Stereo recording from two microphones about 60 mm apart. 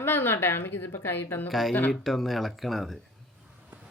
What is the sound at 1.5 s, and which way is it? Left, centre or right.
Speech, centre.